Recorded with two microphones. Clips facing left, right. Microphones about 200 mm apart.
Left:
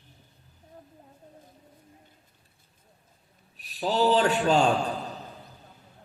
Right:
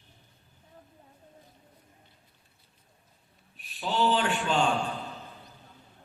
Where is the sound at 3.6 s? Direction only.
40° left (ahead or behind).